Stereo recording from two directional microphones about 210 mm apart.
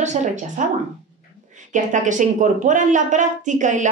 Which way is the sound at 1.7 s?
35° right (ahead or behind).